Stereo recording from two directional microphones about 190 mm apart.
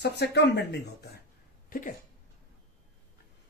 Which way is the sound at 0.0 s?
60° left (ahead or behind).